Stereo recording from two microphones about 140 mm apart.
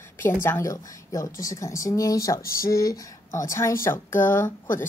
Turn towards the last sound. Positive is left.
turn(degrees=15)  # may be behind; listen again after turning